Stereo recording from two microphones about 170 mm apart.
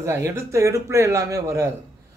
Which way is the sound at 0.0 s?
15° right (ahead or behind).